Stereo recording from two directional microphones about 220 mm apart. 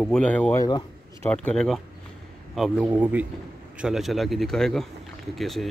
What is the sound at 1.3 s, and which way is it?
Speech, 5° left (ahead or behind).